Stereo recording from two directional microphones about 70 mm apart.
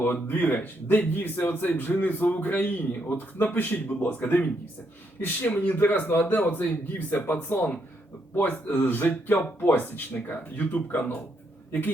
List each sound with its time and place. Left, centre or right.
0.0 s speech: left